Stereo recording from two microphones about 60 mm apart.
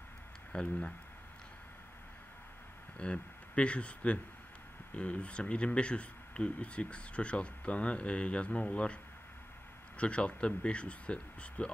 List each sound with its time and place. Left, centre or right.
0.5 s speech: centre
3.0 s speech: centre
9.9 s speech: centre